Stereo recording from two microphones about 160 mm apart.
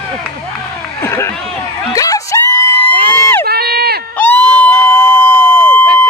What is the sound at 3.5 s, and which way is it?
Run, 75° right (ahead or behind).